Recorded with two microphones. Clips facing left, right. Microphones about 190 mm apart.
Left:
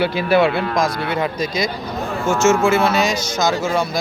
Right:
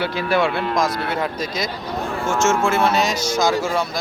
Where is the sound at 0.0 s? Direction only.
10° left (ahead or behind).